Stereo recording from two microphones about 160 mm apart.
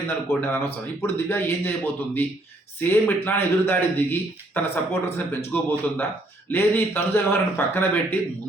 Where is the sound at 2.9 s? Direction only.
15° left (ahead or behind).